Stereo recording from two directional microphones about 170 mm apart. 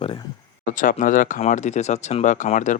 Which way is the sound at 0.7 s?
50° left (ahead or behind).